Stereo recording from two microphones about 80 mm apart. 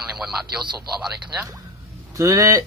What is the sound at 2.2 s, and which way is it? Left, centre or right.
Speech, right.